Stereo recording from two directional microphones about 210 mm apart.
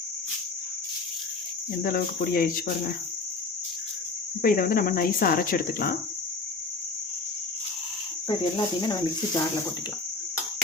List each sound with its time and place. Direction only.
1.8 s speech: 45° left (ahead or behind)
4.4 s speech: 40° left (ahead or behind)
8.3 s speech: 25° left (ahead or behind)